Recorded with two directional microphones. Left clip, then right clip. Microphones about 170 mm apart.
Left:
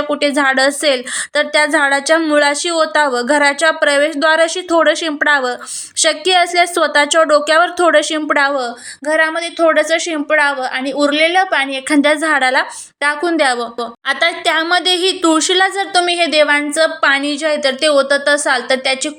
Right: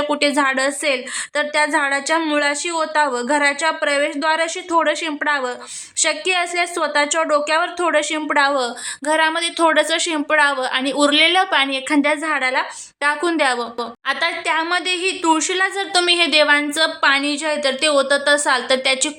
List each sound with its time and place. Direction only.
0.1 s a woman's voice: centre (ahead or behind)
0.4 s a woman's voice: 15° left (ahead or behind)
8.5 s a woman's voice: 5° right (ahead or behind)
11.9 s a woman's voice: 15° left (ahead or behind)
13.0 s a woman's voice: 5° left (ahead or behind)